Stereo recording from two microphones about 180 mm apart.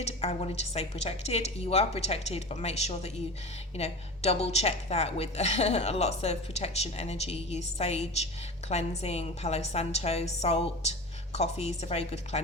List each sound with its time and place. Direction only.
0.0 s a woman's voice: 35° left (ahead or behind)